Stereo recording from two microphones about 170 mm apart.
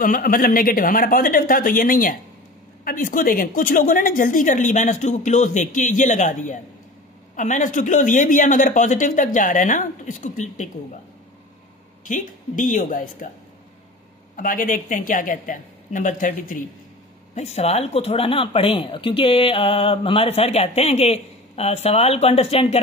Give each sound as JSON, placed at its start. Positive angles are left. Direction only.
{"t": 0.0, "sound": "a woman's voice", "side_deg": 55}
{"t": 12.0, "sound": "a woman's voice", "side_deg": 50}
{"t": 14.3, "sound": "a woman's voice", "side_deg": 55}
{"t": 17.4, "sound": "speech", "side_deg": 40}